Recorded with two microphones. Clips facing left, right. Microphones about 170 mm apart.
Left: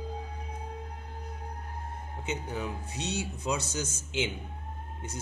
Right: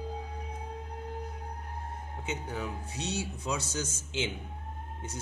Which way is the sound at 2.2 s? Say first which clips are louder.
Left 2 dB; 20° left (ahead or behind).